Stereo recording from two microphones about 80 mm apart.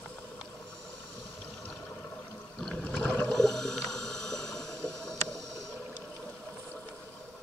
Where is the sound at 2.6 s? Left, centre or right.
Centre.